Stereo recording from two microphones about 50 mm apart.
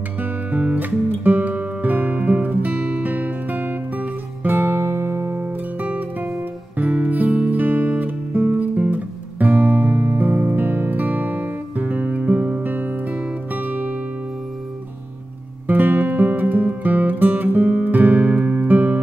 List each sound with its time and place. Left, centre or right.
0.2 s music: right
15.6 s music: right